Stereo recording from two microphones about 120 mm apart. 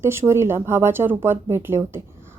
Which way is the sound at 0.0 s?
20° right (ahead or behind).